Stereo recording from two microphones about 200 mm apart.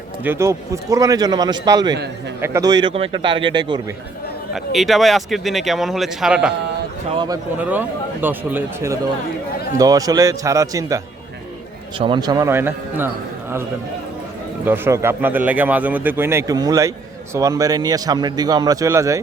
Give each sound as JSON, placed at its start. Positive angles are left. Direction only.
{"t": 0.3, "sound": "a man's voice", "side_deg": -15}
{"t": 4.5, "sound": "speech", "side_deg": 0}
{"t": 7.1, "sound": "a man's voice", "side_deg": -25}
{"t": 7.6, "sound": "a man's voice", "side_deg": -10}
{"t": 14.6, "sound": "a man's voice", "side_deg": -10}